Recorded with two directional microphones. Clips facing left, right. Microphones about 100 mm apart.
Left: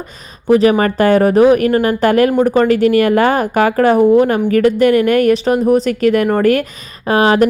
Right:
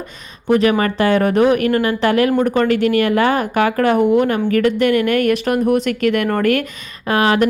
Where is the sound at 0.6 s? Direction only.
35° left (ahead or behind).